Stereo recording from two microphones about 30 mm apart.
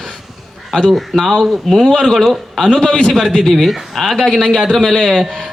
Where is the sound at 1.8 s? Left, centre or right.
Left.